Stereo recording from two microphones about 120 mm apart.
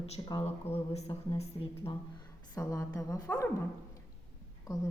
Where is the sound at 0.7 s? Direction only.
60° left (ahead or behind).